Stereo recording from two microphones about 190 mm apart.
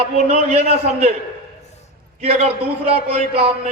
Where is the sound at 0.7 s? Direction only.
35° right (ahead or behind).